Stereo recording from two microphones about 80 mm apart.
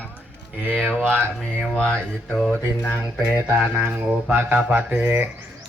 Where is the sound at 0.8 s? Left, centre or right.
Centre.